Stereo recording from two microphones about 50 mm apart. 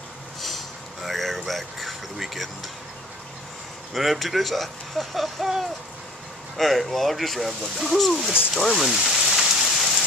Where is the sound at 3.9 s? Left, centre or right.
Centre.